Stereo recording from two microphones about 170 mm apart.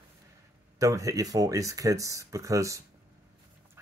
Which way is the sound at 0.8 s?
20° right (ahead or behind).